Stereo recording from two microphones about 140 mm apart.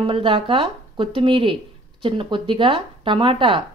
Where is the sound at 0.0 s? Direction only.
35° right (ahead or behind).